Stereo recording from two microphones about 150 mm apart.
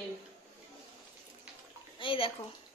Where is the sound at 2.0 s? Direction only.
35° left (ahead or behind).